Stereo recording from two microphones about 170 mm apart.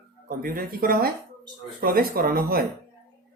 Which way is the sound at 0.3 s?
55° right (ahead or behind).